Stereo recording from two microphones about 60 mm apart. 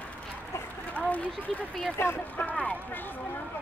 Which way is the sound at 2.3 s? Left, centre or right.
Left.